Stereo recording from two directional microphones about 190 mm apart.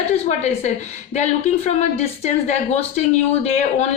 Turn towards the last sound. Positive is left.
turn(degrees=35)  # may be behind; listen again after turning